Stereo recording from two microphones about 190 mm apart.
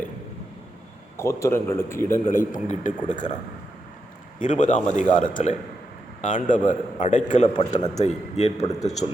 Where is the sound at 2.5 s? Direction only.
40° left (ahead or behind).